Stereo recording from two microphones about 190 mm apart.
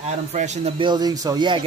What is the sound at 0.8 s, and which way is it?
Speech, 20° right (ahead or behind).